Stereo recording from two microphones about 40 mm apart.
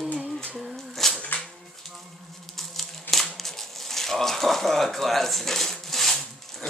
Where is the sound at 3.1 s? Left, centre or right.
Centre.